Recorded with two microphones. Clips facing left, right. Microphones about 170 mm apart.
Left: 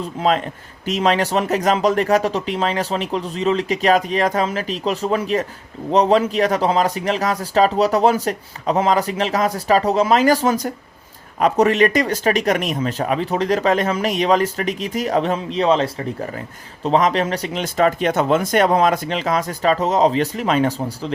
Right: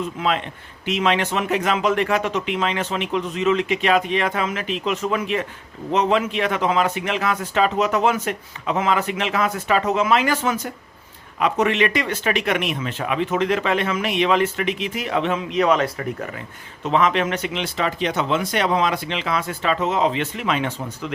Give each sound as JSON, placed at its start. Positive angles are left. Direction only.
{"t": 0.0, "sound": "speech", "side_deg": 40}